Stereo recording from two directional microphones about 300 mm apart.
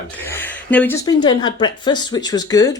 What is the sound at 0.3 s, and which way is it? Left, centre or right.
Speech, centre.